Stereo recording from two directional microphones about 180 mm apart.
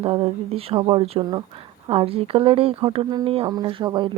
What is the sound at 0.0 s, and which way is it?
Speech, 30° right (ahead or behind).